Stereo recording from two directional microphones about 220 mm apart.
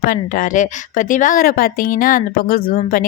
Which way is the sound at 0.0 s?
40° left (ahead or behind).